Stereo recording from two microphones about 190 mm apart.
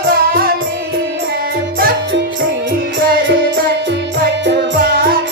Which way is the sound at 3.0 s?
55° right (ahead or behind).